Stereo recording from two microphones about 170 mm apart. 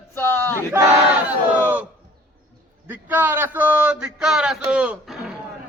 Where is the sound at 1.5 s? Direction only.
10° right (ahead or behind).